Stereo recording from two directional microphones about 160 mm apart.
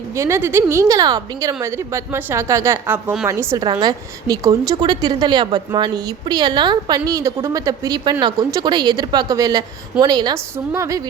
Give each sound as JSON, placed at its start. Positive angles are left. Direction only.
{"t": 0.2, "sound": "a woman's voice", "side_deg": -15}